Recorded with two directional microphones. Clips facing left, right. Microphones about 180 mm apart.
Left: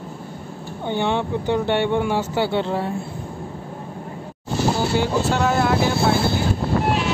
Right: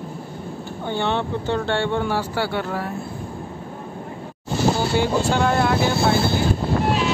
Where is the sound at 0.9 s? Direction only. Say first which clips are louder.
Left 1 dB; 15° left (ahead or behind).